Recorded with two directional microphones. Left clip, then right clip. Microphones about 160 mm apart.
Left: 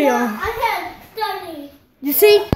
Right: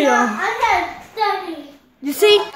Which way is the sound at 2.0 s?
20° left (ahead or behind).